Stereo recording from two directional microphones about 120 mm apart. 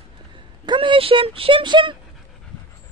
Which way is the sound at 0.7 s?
45° right (ahead or behind).